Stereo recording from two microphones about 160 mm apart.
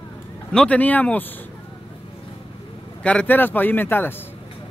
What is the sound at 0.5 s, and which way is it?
Speech, 5° left (ahead or behind).